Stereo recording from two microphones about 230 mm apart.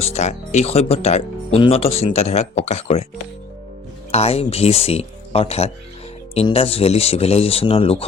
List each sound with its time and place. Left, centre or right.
0.0 s speech: left
4.1 s speech: left